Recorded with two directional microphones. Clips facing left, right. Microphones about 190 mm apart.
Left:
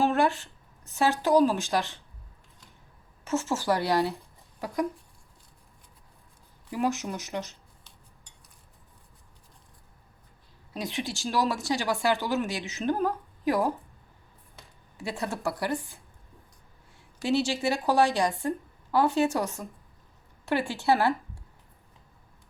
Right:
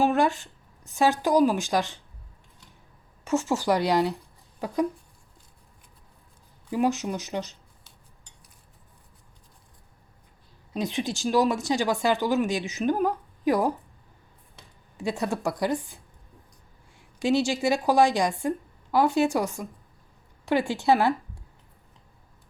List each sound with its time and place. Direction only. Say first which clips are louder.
0.0 s a sound: right 2 dB; 15° right (ahead or behind)
0.9 s speech: right 1 dB; 15° right (ahead or behind)
3.2 s speech: right 3 dB; 15° right (ahead or behind)
6.7 s speech: right 4 dB; 15° right (ahead or behind)
10.8 s speech: right 4 dB; 20° right (ahead or behind)
14.9 s speech: right 5 dB; 15° right (ahead or behind)
17.2 s speech: right 3 dB; 15° right (ahead or behind)